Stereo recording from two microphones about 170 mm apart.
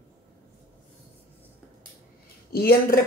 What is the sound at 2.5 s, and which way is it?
Speech, 65° left (ahead or behind).